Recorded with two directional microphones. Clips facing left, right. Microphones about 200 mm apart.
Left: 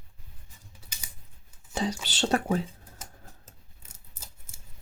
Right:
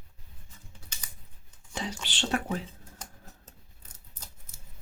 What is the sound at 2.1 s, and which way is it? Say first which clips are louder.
Speech: left 4 dB; 40° left (ahead or behind).